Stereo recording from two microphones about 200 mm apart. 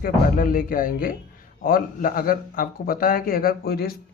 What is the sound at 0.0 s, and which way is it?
A man's voice, 45° left (ahead or behind).